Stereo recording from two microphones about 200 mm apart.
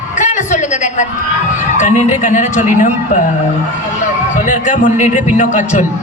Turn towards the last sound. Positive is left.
turn(degrees=40)  # may be behind; listen again after turning